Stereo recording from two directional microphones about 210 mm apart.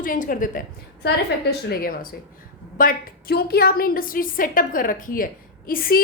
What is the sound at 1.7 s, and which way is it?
A woman's voice, 45° left (ahead or behind).